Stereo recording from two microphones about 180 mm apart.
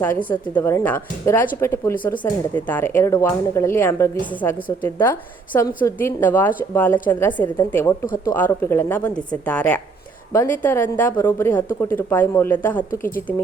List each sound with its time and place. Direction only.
0.3 s a woman's voice: 10° left (ahead or behind)
8.0 s speech: 50° left (ahead or behind)
8.3 s a woman's voice: 15° left (ahead or behind)
12.9 s speech: 50° left (ahead or behind)